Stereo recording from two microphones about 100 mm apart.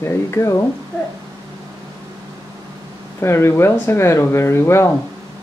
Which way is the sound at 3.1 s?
25° left (ahead or behind).